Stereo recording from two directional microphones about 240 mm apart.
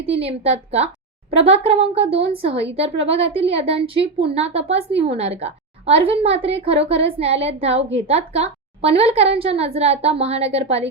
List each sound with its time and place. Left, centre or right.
0.0 s a woman's voice: right